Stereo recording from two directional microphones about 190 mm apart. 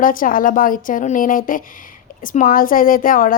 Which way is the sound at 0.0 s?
45° left (ahead or behind).